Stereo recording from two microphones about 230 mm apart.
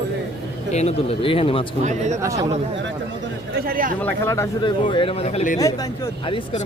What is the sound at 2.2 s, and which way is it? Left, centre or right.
Speech, centre.